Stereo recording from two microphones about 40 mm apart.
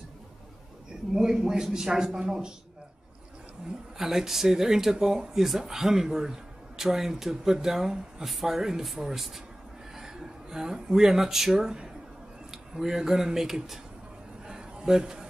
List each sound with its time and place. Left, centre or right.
1.1 s speech: centre
4.0 s speech: centre
9.9 s speech: centre
14.5 s a sound: centre